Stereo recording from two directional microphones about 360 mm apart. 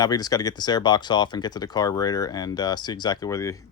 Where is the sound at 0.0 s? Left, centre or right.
Centre.